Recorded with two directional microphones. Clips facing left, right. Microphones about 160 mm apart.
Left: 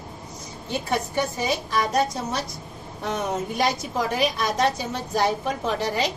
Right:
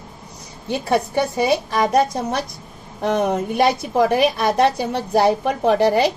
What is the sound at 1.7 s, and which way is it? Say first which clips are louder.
A woman's voice: right 6 dB; 55° right (ahead or behind).